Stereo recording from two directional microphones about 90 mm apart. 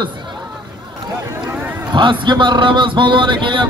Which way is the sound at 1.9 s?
65° right (ahead or behind).